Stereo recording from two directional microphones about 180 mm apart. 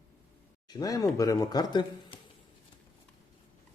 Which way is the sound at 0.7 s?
20° left (ahead or behind).